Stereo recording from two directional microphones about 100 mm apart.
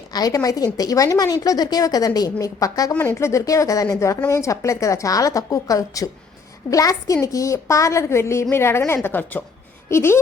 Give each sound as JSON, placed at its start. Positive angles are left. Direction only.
{"t": 0.1, "sound": "a woman's voice", "side_deg": 40}